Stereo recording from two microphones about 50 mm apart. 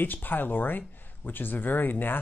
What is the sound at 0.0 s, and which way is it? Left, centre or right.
Speech, left.